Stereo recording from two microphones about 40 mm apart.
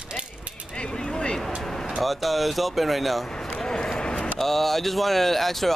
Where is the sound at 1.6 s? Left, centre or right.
Centre.